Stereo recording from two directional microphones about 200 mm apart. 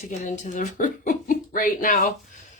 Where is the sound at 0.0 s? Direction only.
35° left (ahead or behind).